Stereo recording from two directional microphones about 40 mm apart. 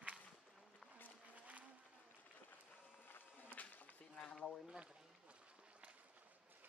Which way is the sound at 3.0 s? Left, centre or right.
Left.